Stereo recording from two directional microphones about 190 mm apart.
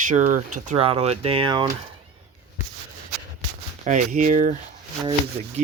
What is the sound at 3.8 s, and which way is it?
Speech, 40° right (ahead or behind).